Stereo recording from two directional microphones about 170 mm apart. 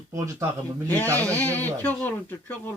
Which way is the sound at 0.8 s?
10° left (ahead or behind).